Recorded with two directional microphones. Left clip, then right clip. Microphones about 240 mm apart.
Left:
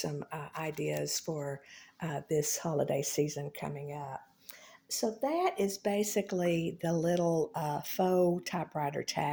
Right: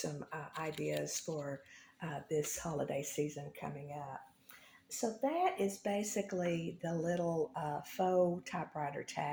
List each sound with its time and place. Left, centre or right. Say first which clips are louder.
0.0 s speech: left 4 dB; left